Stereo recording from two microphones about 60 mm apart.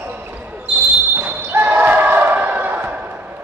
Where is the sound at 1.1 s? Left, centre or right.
Right.